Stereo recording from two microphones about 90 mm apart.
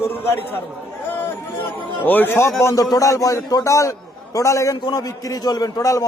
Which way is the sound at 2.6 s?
40° left (ahead or behind).